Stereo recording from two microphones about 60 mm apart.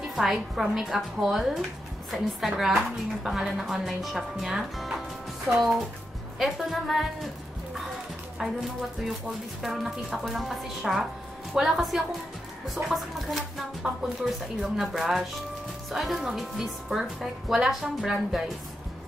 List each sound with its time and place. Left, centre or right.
0.1 s a woman's voice: centre
9.6 s a woman's voice: centre
13.8 s speech: centre
14.2 s a woman's voice: centre